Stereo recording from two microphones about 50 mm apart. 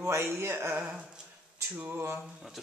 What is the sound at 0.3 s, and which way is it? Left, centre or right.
Speech, right.